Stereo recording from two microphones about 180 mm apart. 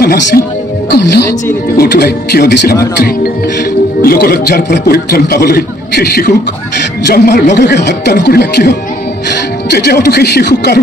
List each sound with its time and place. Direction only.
0.0 s a man's voice: 60° left (ahead or behind)
4.0 s a man's voice: 55° left (ahead or behind)